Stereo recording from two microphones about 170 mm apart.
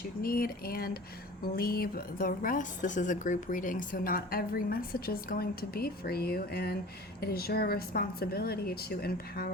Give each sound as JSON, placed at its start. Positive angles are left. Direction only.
{"t": 0.2, "sound": "speech", "side_deg": 60}